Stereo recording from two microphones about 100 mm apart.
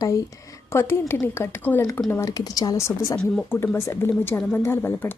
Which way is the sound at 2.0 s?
30° left (ahead or behind).